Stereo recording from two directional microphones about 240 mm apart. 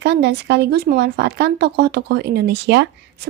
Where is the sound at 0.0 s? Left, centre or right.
Right.